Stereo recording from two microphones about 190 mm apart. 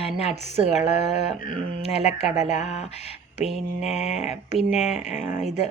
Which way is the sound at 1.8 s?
35° left (ahead or behind).